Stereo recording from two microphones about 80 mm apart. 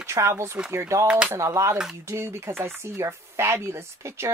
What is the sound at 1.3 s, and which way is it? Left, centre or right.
Speech, right.